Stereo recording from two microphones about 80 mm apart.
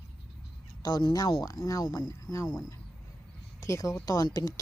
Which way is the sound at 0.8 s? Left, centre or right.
Left.